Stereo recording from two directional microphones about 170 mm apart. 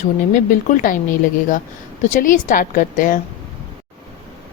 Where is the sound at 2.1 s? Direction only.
50° left (ahead or behind).